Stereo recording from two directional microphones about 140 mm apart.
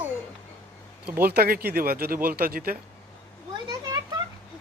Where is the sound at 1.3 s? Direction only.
90° right.